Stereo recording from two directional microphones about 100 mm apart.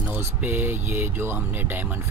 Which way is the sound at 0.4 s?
20° right (ahead or behind).